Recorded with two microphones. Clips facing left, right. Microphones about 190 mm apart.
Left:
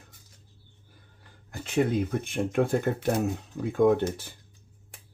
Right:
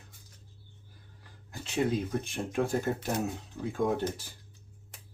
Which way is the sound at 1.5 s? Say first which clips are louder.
Left 6 dB; 55° left (ahead or behind).